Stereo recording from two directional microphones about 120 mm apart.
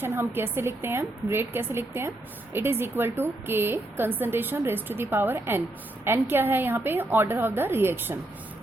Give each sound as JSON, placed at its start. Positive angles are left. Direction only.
{"t": 0.0, "sound": "a woman's voice", "side_deg": -20}